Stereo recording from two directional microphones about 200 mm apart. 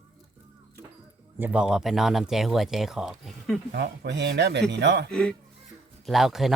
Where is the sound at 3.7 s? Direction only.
60° right (ahead or behind).